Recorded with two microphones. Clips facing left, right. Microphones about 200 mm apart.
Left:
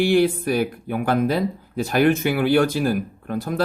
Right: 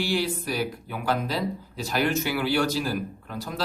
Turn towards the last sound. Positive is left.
turn(degrees=55)  # may be behind; listen again after turning